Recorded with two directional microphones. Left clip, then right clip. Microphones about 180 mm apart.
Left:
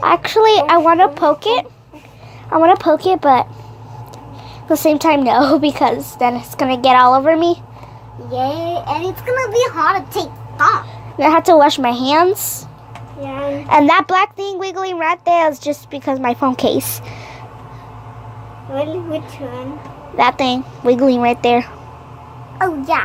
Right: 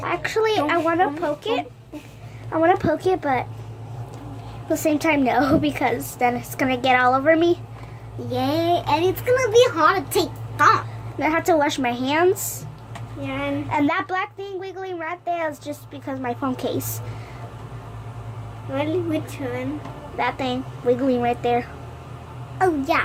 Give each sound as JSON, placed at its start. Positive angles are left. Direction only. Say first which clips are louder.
{"t": 0.0, "sound": "a woman's voice", "louder": "left 11 dB", "side_deg": 25}
{"t": 4.7, "sound": "a woman's voice", "louder": "left 8 dB", "side_deg": 25}
{"t": 8.3, "sound": "a child's voice", "louder": "left 2 dB", "side_deg": -40}
{"t": 9.2, "sound": "a child's voice", "louder": "left 2 dB", "side_deg": -25}
{"t": 10.1, "sound": "a child's voice", "louder": "left 1 dB", "side_deg": -40}
{"t": 11.2, "sound": "a woman's voice", "louder": "left 10 dB", "side_deg": 25}
{"t": 13.7, "sound": "a child's voice", "louder": "left 13 dB", "side_deg": 30}
{"t": 20.1, "sound": "a woman's voice", "louder": "left 10 dB", "side_deg": 30}
{"t": 22.5, "sound": "a child's voice", "louder": "left 4 dB", "side_deg": -10}